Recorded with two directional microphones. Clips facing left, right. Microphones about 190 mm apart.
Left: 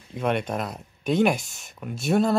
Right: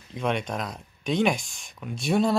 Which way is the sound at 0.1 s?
5° left (ahead or behind).